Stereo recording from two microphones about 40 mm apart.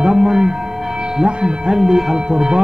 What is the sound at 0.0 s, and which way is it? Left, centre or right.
Music, centre.